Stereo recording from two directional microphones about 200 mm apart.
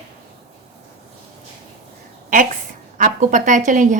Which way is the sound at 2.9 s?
40° right (ahead or behind).